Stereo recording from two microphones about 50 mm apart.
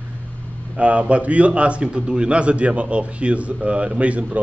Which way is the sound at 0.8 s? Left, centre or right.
Right.